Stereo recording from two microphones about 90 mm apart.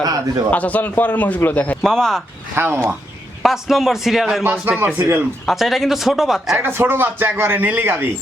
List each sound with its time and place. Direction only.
0.0 s speech: 45° right (ahead or behind)
0.5 s a man's voice: 15° left (ahead or behind)
1.8 s a man's voice: 5° left (ahead or behind)
2.6 s a man's voice: 25° right (ahead or behind)
3.4 s speech: 5° right (ahead or behind)
4.9 s speech: 30° right (ahead or behind)
5.5 s speech: centre (ahead or behind)
6.6 s a man's voice: 25° right (ahead or behind)